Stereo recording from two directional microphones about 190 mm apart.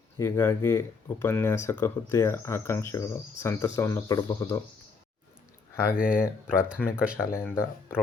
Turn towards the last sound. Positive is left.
turn(degrees=10)  # may be behind; listen again after turning